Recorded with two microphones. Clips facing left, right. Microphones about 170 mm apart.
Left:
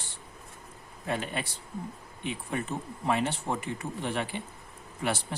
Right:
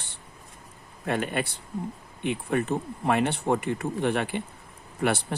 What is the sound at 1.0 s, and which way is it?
Speech, 60° right (ahead or behind).